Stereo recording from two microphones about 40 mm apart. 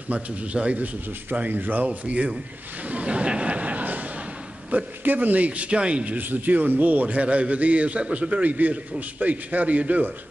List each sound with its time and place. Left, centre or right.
0.1 s a man's voice: right
1.5 s a man's voice: right
2.0 s a man's voice: right
2.9 s a sound: right
4.6 s a man's voice: right
5.7 s a man's voice: right
6.1 s a man's voice: right